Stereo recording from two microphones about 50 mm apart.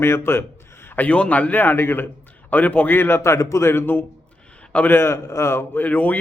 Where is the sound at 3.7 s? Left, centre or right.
Left.